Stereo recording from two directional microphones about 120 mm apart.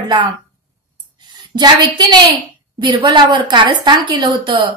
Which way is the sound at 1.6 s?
35° right (ahead or behind).